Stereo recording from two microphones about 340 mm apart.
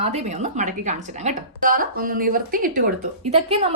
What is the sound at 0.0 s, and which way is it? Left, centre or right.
A woman's voice, centre.